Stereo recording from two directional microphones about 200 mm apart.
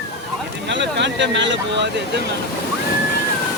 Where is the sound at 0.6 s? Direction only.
60° right (ahead or behind).